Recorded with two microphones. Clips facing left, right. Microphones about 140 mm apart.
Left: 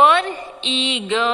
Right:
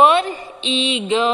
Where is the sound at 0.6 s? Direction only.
20° left (ahead or behind).